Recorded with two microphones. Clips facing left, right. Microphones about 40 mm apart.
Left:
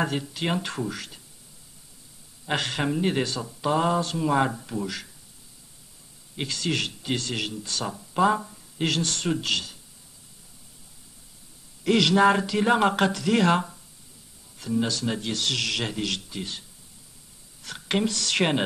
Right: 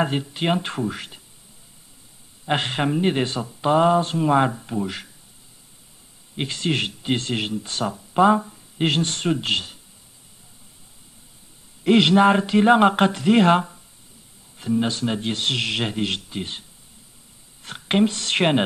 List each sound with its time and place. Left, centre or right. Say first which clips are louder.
0.0 s speech: right 4 dB; right
2.4 s speech: right 4 dB; right
6.3 s speech: right 4 dB; right
11.8 s speech: right 4 dB; right
17.6 s speech: right 6 dB; right